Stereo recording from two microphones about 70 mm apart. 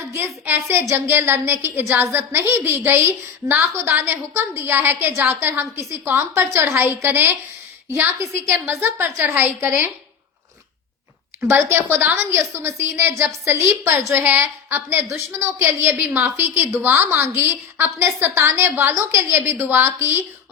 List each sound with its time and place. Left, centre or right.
0.1 s a woman's voice: right
11.3 s a woman's voice: right
12.4 s a woman's voice: right
17.7 s a woman's voice: right
18.3 s a woman's voice: right